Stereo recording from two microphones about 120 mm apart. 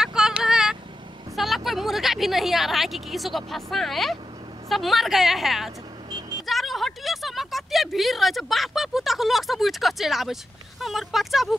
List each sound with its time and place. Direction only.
0.0 s a sound: 5° right (ahead or behind)
1.3 s a woman's voice: centre (ahead or behind)
6.0 s vehicle: 40° right (ahead or behind)
6.4 s speech: centre (ahead or behind)